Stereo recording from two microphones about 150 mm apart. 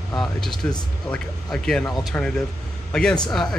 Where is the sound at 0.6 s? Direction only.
10° left (ahead or behind).